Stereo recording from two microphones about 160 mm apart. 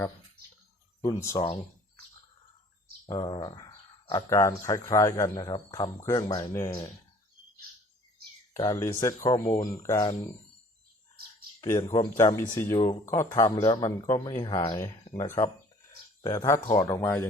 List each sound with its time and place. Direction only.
1.0 s speech: 20° left (ahead or behind)
3.1 s speech: 30° left (ahead or behind)
5.5 s speech: 30° left (ahead or behind)
8.5 s speech: 20° left (ahead or behind)
11.9 s speech: 20° left (ahead or behind)
13.6 s speech: 30° left (ahead or behind); by 17.2 s 15° left (ahead or behind)